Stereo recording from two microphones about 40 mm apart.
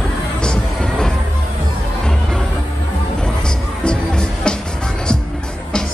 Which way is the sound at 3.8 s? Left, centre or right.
Left.